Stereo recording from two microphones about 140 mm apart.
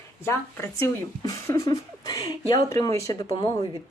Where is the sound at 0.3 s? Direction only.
15° left (ahead or behind).